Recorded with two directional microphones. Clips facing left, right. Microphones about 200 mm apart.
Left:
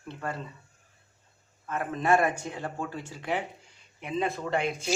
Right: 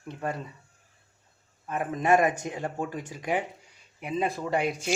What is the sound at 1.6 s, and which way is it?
Speech, 15° right (ahead or behind).